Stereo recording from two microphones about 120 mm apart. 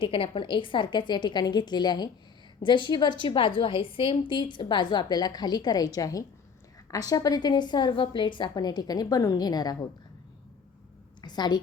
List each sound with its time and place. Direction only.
0.0 s a woman's voice: 50° left (ahead or behind)
11.2 s a woman's voice: 35° left (ahead or behind)